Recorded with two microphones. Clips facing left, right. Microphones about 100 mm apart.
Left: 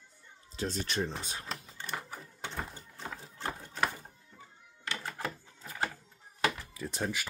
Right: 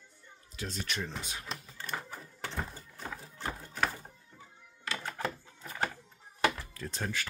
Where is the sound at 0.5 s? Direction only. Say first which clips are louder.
Left 4 dB; 30° left (ahead or behind).